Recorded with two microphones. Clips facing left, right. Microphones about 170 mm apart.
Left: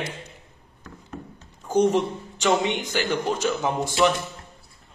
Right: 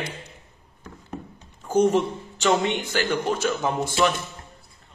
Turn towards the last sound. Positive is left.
turn(degrees=15)  # may be behind; listen again after turning